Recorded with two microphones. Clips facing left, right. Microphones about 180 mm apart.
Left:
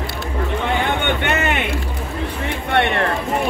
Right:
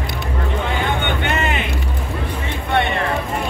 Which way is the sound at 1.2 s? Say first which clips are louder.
Left 1 dB; 65° left (ahead or behind).